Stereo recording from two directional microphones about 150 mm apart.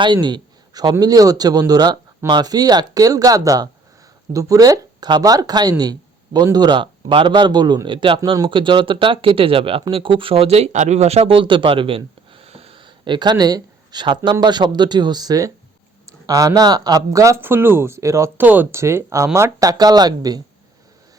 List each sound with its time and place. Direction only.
0.0 s speech: 30° right (ahead or behind)